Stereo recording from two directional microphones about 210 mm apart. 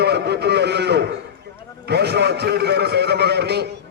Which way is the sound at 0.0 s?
50° right (ahead or behind).